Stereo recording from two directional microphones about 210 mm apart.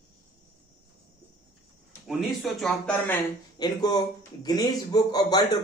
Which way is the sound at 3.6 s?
20° left (ahead or behind).